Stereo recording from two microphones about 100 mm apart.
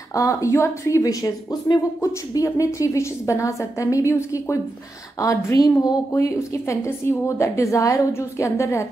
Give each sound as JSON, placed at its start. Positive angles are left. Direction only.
{"t": 0.1, "sound": "speech", "side_deg": 35}